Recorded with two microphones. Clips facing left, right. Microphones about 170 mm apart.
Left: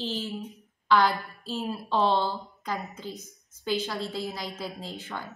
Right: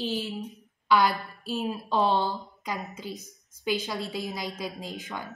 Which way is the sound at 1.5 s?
15° right (ahead or behind).